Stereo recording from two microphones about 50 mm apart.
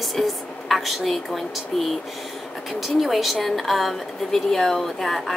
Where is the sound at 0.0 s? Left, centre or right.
Centre.